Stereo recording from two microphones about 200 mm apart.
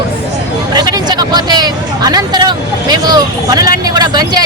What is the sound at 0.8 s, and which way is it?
Speech, 20° right (ahead or behind).